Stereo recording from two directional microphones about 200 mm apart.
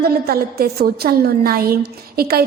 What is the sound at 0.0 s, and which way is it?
A woman's voice, 50° right (ahead or behind).